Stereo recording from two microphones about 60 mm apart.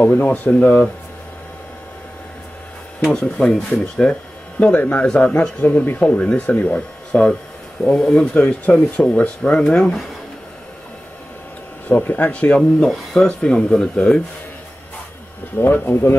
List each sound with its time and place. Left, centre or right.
0.2 s speech: left
3.1 s speech: centre
4.7 s speech: left
5.0 s speech: centre
5.6 s speech: left
8.3 s speech: left; by 10.0 s centre
11.9 s speech: left
12.8 s speech: centre
15.5 s speech: left